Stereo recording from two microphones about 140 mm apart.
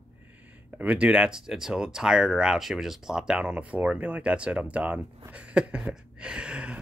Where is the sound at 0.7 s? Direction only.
10° right (ahead or behind).